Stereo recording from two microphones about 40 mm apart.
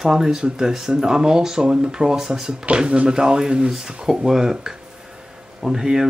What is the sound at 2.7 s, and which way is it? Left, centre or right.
Speech, right.